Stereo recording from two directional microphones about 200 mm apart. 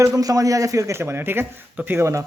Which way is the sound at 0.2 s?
15° right (ahead or behind).